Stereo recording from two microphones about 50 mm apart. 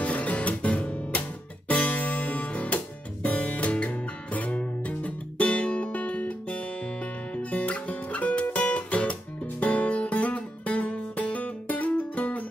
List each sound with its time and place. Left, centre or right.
0.0 s music: left